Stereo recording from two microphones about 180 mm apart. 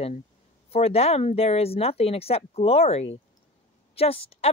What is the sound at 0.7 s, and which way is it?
Speech, 35° left (ahead or behind).